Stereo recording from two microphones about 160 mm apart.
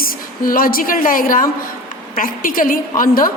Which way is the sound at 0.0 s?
65° left (ahead or behind).